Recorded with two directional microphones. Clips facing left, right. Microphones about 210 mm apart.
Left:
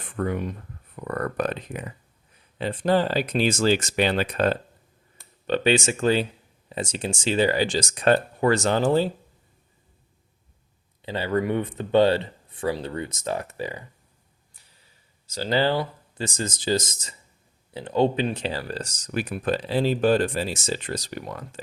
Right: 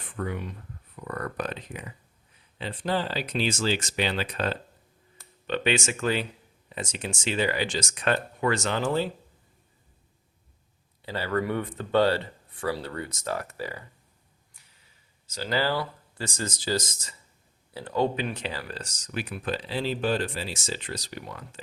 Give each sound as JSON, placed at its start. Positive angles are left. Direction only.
{"t": 0.2, "sound": "speech", "side_deg": 50}
{"t": 5.5, "sound": "speech", "side_deg": 35}
{"t": 11.0, "sound": "speech", "side_deg": 20}
{"t": 15.3, "sound": "speech", "side_deg": 30}